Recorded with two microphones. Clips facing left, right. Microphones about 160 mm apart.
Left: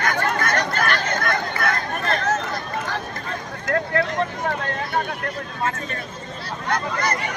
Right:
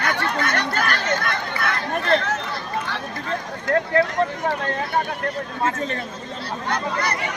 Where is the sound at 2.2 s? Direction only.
45° left (ahead or behind).